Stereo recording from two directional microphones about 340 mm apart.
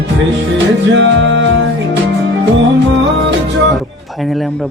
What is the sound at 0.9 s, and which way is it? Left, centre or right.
Music, right.